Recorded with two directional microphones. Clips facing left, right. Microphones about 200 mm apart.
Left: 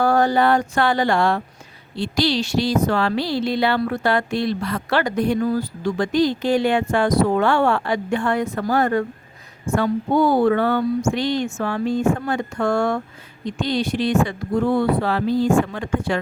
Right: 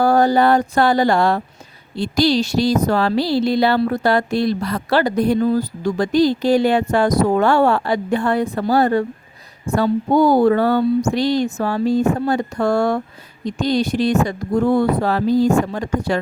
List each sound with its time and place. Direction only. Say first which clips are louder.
0.0 s speech: right 3 dB; 35° right (ahead or behind)